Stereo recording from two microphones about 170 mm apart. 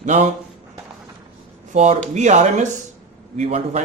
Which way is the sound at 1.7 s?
45° right (ahead or behind).